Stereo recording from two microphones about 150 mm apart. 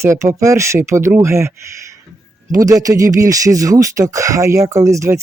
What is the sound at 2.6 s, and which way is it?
Speech, 25° right (ahead or behind).